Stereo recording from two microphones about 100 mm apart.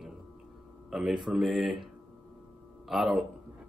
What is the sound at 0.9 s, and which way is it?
A man's voice, 5° right (ahead or behind).